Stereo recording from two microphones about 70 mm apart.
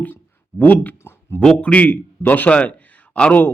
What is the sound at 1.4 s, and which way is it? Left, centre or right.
A man's voice, centre.